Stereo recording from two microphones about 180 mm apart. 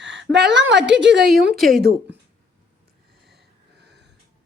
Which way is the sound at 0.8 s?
5° right (ahead or behind).